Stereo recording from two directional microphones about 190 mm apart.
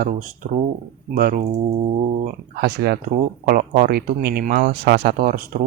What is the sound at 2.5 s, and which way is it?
Speech, 55° right (ahead or behind).